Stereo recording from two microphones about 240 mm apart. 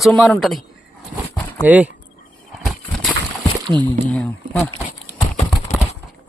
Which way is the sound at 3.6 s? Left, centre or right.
Centre.